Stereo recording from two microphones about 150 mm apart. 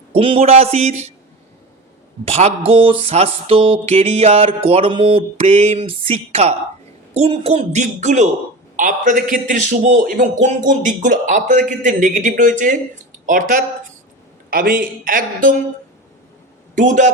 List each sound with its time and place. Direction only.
0.1 s a woman's voice: 40° right (ahead or behind)
2.2 s mantra: 45° right (ahead or behind)
7.1 s a woman's voice: 45° right (ahead or behind); by 15.5 s 65° right (ahead or behind)
16.7 s speech: 60° right (ahead or behind)